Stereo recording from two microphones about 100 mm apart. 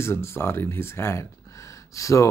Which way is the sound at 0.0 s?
25° left (ahead or behind).